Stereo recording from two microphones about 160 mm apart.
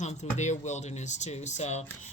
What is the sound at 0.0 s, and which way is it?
Speech, 45° left (ahead or behind).